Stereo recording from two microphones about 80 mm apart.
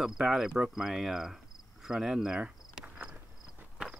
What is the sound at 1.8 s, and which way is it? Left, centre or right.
Cricket, centre.